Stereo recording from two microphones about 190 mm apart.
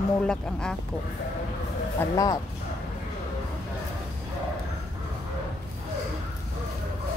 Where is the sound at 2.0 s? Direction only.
20° left (ahead or behind).